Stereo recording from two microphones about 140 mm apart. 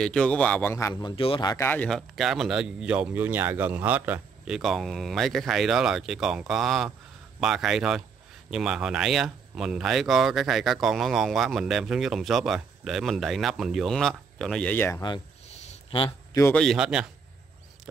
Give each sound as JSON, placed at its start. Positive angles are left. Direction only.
{"t": 0.0, "sound": "speech", "side_deg": 5}
{"t": 1.0, "sound": "speech", "side_deg": 40}
{"t": 1.5, "sound": "speech", "side_deg": 15}
{"t": 1.9, "sound": "speech", "side_deg": 0}
{"t": 4.6, "sound": "speech", "side_deg": 0}
{"t": 15.7, "sound": "a sound", "side_deg": 40}
{"t": 16.5, "sound": "speech", "side_deg": 0}